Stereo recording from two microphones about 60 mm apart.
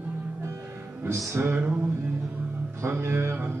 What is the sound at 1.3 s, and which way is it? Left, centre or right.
Music, right.